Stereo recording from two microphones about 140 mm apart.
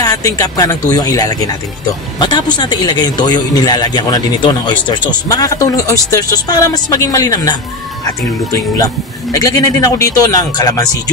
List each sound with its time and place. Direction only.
0.0 s speech: 25° left (ahead or behind)